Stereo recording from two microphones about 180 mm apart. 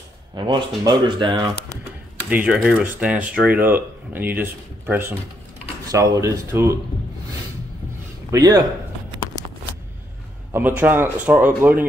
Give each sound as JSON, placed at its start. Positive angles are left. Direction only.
{"t": 0.3, "sound": "speech", "side_deg": -25}
{"t": 2.2, "sound": "speech", "side_deg": -5}
{"t": 8.3, "sound": "speech", "side_deg": -20}
{"t": 10.5, "sound": "speech", "side_deg": -10}